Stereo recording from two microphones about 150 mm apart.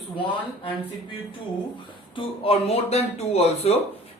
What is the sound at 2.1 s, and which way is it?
Speech, 40° left (ahead or behind).